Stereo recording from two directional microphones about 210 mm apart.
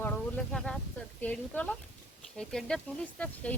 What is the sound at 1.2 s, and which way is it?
A woman's voice, 5° left (ahead or behind).